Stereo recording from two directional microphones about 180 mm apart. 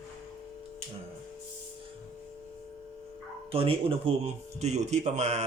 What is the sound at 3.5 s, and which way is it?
Speech, 30° right (ahead or behind).